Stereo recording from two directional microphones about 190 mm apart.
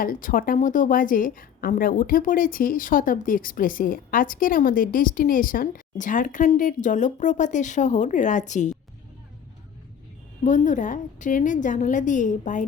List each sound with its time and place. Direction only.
0.0 s a woman's voice: 45° left (ahead or behind)
10.4 s a woman's voice: 40° left (ahead or behind)